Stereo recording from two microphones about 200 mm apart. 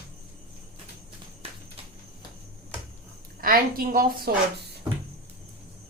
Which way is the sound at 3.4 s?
45° right (ahead or behind).